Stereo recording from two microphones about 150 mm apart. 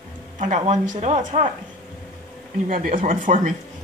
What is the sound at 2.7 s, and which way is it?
Speech, 65° right (ahead or behind).